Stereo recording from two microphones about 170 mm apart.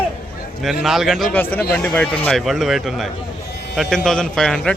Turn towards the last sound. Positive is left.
turn(degrees=0)  # may be behind; listen again after turning